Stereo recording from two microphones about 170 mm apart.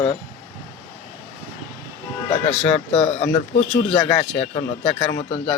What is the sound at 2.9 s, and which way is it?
Speech, 35° left (ahead or behind).